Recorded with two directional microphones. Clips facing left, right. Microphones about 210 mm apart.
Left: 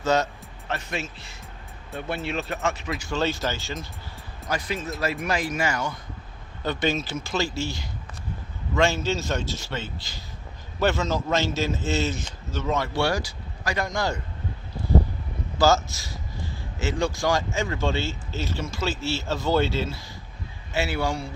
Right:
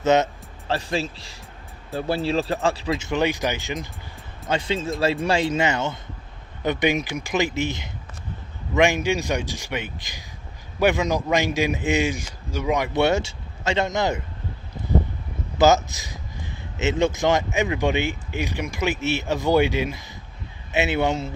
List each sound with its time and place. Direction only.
0.0 s speech: 20° right (ahead or behind)
0.7 s speech: 30° right (ahead or behind)
15.5 s speech: 20° right (ahead or behind)